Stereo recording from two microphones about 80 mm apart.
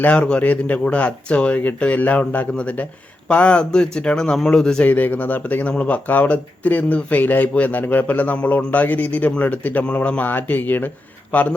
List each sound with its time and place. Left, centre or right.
0.0 s speech: centre
4.9 s speech: left